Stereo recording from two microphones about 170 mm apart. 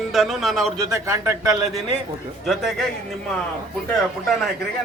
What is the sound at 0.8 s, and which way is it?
Speech, 20° right (ahead or behind).